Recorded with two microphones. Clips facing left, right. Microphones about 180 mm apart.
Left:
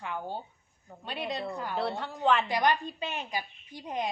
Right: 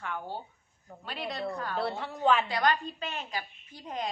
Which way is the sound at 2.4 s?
20° left (ahead or behind).